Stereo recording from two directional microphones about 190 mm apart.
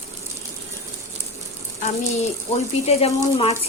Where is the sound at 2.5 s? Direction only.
35° left (ahead or behind).